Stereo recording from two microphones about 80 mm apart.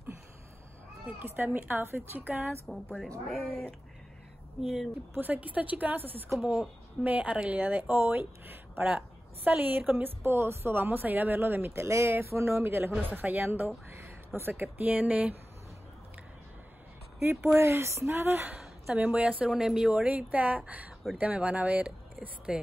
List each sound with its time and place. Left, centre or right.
1.0 s speech: right
2.7 s speech: centre
5.1 s speech: right
6.3 s speech: centre
7.1 s speech: centre; by 12.9 s right
13.0 s speech: right
17.6 s speech: right
18.9 s a woman's voice: centre
19.9 s speech: centre